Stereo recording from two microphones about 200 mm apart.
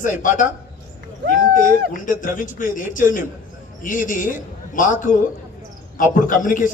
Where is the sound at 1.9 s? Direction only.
40° left (ahead or behind).